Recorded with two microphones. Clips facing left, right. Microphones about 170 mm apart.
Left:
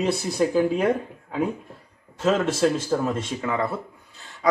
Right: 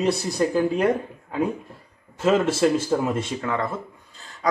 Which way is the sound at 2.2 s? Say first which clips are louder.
Right 2 dB; 10° right (ahead or behind).